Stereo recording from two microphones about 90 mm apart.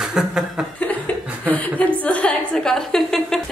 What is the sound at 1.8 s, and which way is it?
A woman's voice, 15° left (ahead or behind).